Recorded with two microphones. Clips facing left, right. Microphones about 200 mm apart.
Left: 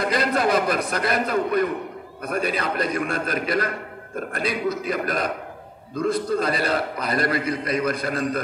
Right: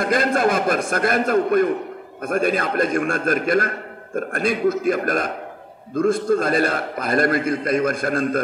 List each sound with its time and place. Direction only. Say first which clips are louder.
0.0 s a man's voice: right 3 dB; 50° right (ahead or behind)